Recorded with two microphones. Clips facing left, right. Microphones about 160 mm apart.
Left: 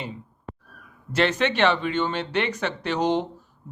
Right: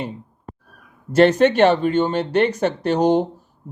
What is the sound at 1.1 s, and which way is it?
Speech, 45° right (ahead or behind).